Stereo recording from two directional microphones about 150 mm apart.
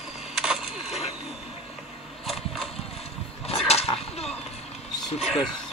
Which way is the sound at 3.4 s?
45° left (ahead or behind).